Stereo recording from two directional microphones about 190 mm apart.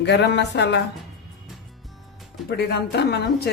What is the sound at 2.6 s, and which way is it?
Speech, 60° left (ahead or behind).